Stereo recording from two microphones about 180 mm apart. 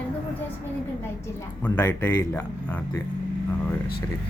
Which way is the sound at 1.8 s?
15° left (ahead or behind).